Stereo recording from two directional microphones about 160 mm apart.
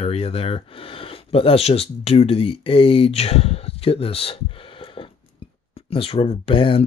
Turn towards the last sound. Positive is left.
turn(degrees=35)  # may be behind; listen again after turning